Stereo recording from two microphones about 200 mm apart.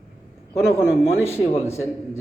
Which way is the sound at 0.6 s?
5° right (ahead or behind).